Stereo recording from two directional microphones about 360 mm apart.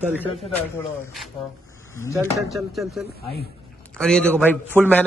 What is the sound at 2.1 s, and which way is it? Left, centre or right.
Speech, centre.